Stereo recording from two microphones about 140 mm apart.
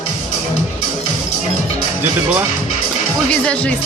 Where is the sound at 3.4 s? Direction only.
10° left (ahead or behind).